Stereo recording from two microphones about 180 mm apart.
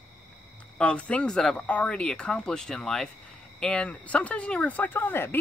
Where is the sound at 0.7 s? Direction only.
5° left (ahead or behind).